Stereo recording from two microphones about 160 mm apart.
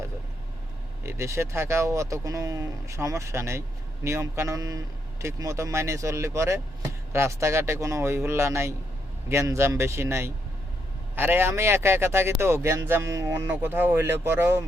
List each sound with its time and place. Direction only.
1.0 s speech: 15° right (ahead or behind)